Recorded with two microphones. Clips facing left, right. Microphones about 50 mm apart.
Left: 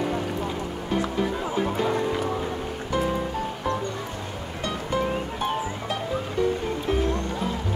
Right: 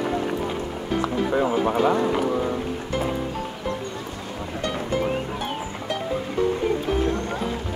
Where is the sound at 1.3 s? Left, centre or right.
Right.